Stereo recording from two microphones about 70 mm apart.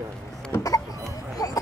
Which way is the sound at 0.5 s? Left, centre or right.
Left.